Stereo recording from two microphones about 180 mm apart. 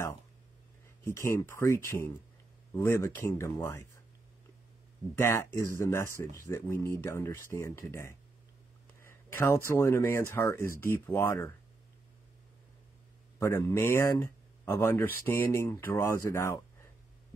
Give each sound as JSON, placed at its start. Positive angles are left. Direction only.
{"t": 1.0, "sound": "speech", "side_deg": 15}
{"t": 5.1, "sound": "speech", "side_deg": 15}
{"t": 13.4, "sound": "speech", "side_deg": 15}